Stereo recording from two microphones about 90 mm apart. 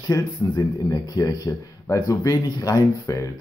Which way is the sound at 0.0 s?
40° left (ahead or behind).